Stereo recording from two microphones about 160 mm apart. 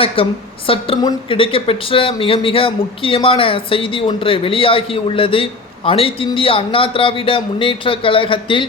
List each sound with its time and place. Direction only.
0.2 s a woman's voice: 35° left (ahead or behind)